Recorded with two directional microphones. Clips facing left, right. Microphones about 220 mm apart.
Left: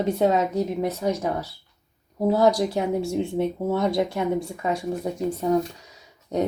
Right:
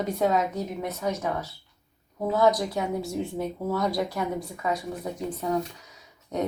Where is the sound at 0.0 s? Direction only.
30° left (ahead or behind).